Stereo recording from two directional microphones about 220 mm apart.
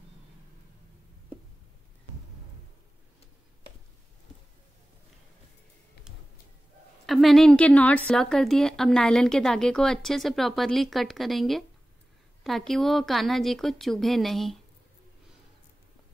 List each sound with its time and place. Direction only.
7.1 s a woman's voice: centre (ahead or behind)